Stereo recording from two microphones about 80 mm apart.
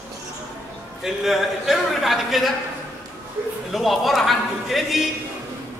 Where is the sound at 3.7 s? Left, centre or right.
Centre.